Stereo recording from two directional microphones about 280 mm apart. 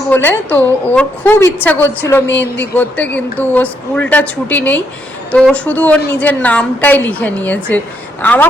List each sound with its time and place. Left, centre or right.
0.1 s a woman's voice: centre